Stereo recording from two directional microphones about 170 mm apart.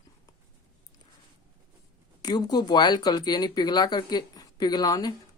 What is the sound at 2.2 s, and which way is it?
Speech, 25° left (ahead or behind).